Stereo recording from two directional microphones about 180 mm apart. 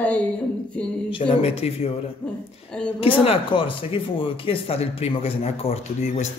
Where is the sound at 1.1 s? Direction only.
30° left (ahead or behind).